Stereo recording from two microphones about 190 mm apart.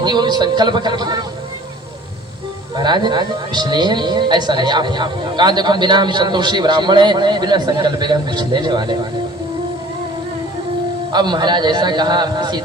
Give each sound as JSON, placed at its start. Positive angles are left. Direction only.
{"t": 0.0, "sound": "speech", "side_deg": -20}
{"t": 2.7, "sound": "speech", "side_deg": -20}
{"t": 11.1, "sound": "speech", "side_deg": -20}